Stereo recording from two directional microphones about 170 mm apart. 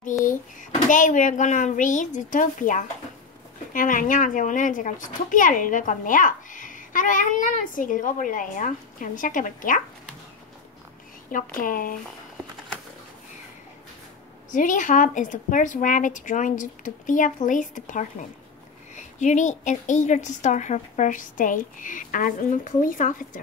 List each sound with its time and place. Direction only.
0.2 s a child's voice: 50° left (ahead or behind)
11.3 s a woman's voice: 55° left (ahead or behind)
14.5 s a woman's voice: 50° left (ahead or behind)